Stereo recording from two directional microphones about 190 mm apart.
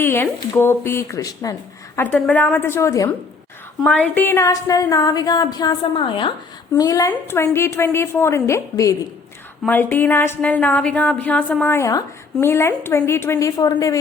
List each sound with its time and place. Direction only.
0.0 s a woman's voice: 10° left (ahead or behind)
3.8 s a sound: 5° left (ahead or behind); by 6.3 s 25° left (ahead or behind)
6.7 s a woman's voice: 20° left (ahead or behind)